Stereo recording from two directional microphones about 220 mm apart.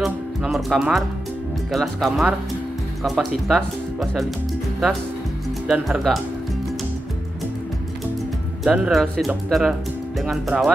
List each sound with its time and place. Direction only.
0.0 s music: centre (ahead or behind)
1.7 s speech: centre (ahead or behind)
5.7 s speech: centre (ahead or behind)
8.6 s speech: centre (ahead or behind)